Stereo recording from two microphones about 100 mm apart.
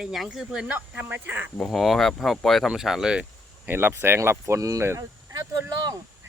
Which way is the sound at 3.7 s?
20° right (ahead or behind).